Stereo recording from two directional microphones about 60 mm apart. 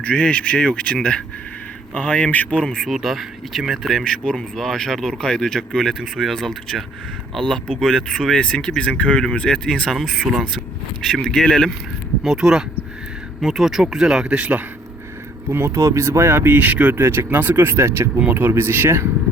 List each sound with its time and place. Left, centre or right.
0.0 s speech: left
2.6 s speech: centre
2.9 s speech: centre
4.0 s speech: centre
9.9 s speech: centre
12.2 s speech: centre
15.4 s speech: right
15.7 s speech: right
16.5 s speech: right
16.9 s speech: right
18.3 s speech: right